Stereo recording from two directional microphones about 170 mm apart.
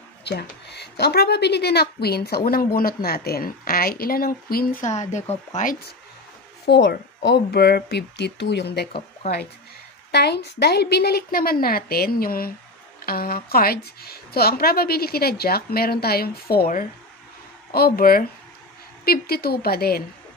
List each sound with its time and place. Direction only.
0.2 s speech: 85° left; by 5.8 s 45° left (ahead or behind)
6.7 s speech: 85° left
10.1 s speech: 75° left (ahead or behind)